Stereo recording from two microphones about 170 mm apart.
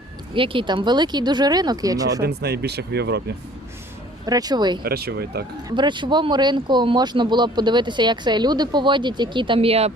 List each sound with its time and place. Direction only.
0.3 s speech: 30° right (ahead or behind)
2.2 s speech: 70° right (ahead or behind)
4.3 s speech: 20° right (ahead or behind)
4.8 s speech: 65° right (ahead or behind)
5.6 s speech: 25° right (ahead or behind)